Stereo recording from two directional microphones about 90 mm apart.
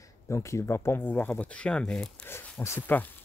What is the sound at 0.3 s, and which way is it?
Speech, 35° left (ahead or behind).